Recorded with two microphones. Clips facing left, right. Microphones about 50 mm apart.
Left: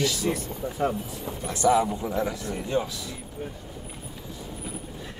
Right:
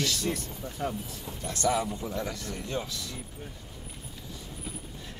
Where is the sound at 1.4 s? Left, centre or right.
Centre.